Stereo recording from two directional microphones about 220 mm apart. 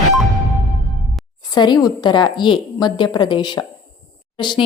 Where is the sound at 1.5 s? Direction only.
20° left (ahead or behind).